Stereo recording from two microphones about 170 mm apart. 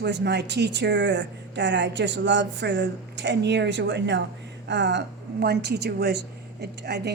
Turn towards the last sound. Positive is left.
turn(degrees=-80)